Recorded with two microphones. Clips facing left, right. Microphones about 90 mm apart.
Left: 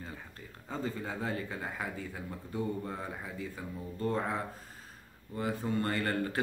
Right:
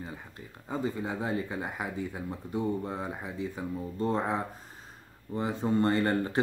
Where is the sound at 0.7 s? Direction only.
15° right (ahead or behind).